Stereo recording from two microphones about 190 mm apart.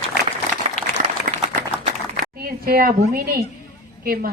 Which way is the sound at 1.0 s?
45° right (ahead or behind).